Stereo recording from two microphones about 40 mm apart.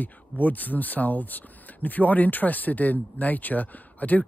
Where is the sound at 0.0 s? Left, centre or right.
Left.